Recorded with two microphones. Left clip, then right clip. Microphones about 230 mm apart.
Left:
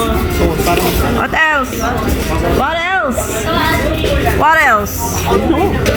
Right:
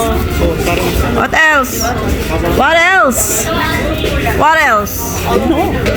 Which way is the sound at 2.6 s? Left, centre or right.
Right.